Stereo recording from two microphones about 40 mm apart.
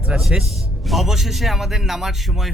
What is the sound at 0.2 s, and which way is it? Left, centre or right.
A man's voice, centre.